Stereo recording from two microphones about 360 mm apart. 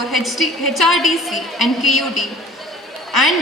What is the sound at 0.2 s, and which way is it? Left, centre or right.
A woman's voice, centre.